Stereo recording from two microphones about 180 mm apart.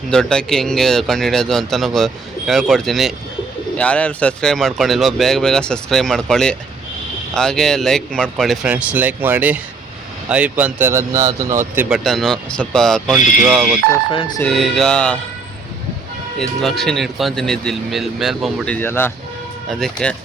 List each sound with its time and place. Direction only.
0.1 s speech: 5° left (ahead or behind); by 11.9 s 10° right (ahead or behind)
12.0 s speech: centre (ahead or behind)
14.1 s speech: 30° left (ahead or behind)
14.4 s speech: centre (ahead or behind)
16.4 s speech: centre (ahead or behind)